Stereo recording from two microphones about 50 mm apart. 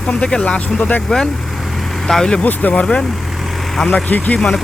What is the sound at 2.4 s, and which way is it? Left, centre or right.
Speech, left.